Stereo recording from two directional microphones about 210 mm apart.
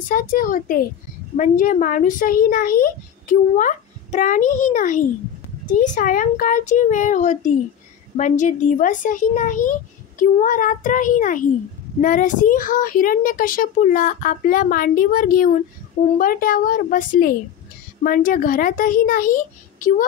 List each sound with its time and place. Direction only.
0.1 s a child's voice: 40° left (ahead or behind)